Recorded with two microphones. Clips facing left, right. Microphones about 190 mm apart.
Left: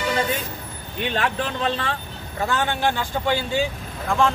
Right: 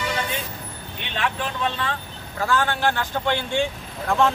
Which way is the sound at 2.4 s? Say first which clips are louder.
Right 1 dB; 20° left (ahead or behind).